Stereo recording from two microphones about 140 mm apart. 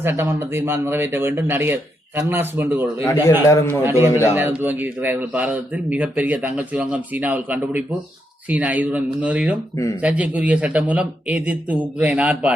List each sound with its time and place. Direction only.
0.0 s speech: 15° right (ahead or behind)
3.4 s speech: 20° left (ahead or behind)
3.8 s speech: 15° right (ahead or behind)